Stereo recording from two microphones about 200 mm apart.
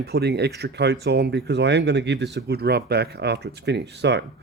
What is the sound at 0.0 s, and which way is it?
Speech, 55° right (ahead or behind).